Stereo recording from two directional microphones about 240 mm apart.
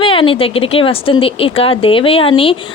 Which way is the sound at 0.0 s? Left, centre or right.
Left.